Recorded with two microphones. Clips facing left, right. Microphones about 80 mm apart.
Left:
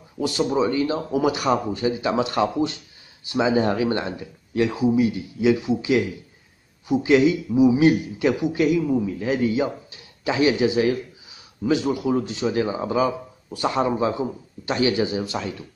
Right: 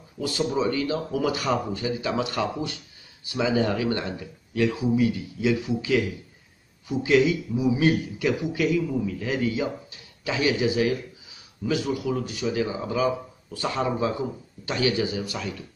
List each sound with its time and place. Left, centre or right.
0.2 s a man's voice: left